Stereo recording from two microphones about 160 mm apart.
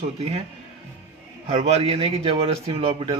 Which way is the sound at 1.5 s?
40° right (ahead or behind).